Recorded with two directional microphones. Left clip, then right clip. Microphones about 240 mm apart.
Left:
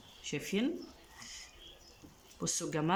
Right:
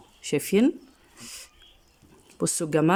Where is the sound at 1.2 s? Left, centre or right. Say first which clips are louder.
Right 6 dB; right.